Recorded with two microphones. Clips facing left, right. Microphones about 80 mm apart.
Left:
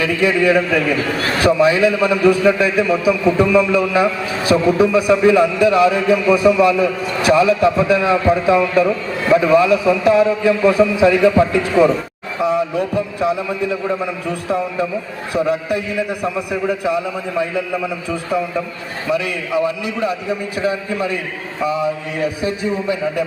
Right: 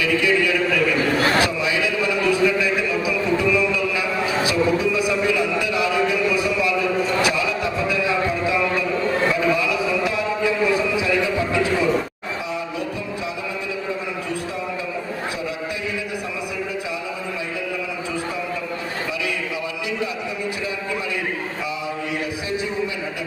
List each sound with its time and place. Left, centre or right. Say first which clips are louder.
0.0 s a man's voice: left 4 dB; left
15.4 s a man's voice: left 8 dB; left
19.1 s a man's voice: left 7 dB; left